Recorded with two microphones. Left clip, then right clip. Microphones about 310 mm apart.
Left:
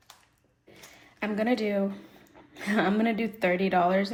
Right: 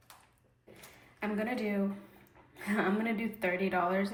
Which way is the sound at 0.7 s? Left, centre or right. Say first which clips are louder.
Left 6 dB; centre.